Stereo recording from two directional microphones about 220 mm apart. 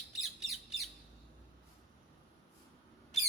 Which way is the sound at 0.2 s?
Centre (ahead or behind).